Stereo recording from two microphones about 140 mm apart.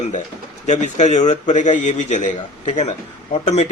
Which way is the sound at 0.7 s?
60° left (ahead or behind).